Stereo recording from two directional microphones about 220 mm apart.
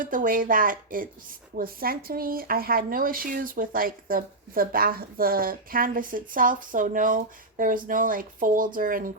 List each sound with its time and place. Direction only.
0.0 s speech: 40° right (ahead or behind)